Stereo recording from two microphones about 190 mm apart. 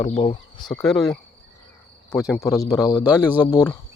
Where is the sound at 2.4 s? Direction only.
15° left (ahead or behind).